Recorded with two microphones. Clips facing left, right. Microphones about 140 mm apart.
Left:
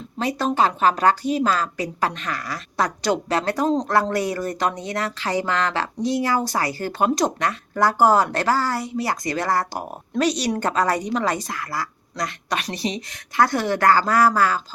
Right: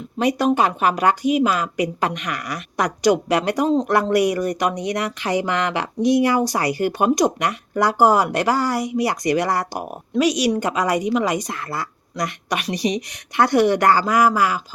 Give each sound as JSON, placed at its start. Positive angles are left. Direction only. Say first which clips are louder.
{"t": 0.2, "sound": "speech", "louder": "right 3 dB", "side_deg": -15}